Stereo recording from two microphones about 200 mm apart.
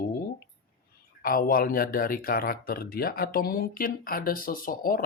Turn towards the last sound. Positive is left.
turn(degrees=45)  # may be behind; listen again after turning